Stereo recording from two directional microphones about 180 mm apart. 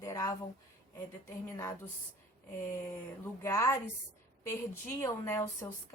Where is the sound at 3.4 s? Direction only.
15° left (ahead or behind).